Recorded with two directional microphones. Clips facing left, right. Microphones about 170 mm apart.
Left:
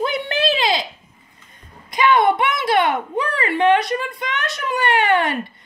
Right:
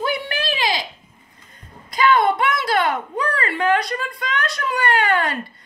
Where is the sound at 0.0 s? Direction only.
25° left (ahead or behind).